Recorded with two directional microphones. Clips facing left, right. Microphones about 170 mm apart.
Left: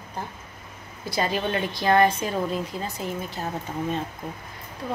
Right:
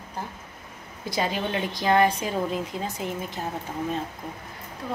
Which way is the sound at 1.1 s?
15° right (ahead or behind).